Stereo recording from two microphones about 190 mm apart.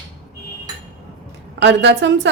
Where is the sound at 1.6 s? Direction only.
65° right (ahead or behind).